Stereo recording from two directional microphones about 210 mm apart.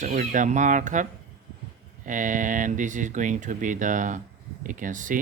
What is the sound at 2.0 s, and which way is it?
Speech, 40° right (ahead or behind).